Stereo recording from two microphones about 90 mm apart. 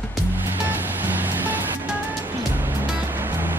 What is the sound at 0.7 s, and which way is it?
Music, 20° right (ahead or behind).